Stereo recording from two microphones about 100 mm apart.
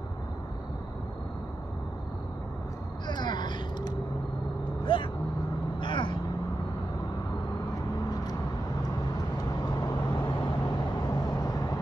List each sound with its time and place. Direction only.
3.1 s a sound: 45° left (ahead or behind)
4.8 s vehicle: 60° left (ahead or behind)
9.8 s vehicle: 40° left (ahead or behind)